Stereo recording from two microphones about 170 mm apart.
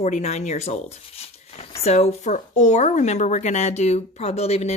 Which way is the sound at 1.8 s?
40° left (ahead or behind).